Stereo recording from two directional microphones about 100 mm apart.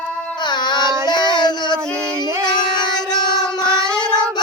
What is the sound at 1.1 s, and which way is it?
Yodeling, 45° left (ahead or behind).